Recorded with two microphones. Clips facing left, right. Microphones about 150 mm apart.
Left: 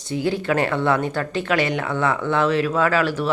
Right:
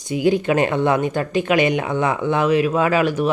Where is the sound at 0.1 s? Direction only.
15° right (ahead or behind).